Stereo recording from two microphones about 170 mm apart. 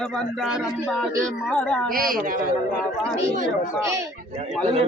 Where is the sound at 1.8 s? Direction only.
55° right (ahead or behind).